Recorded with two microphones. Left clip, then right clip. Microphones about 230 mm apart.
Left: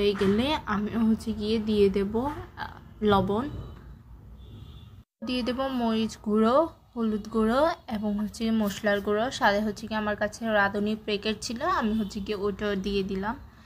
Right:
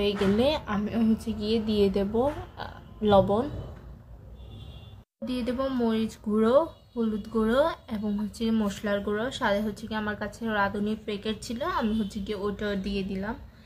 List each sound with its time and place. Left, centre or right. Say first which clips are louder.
0.0 s a woman's voice: even; centre
5.2 s a woman's voice: left 1 dB; centre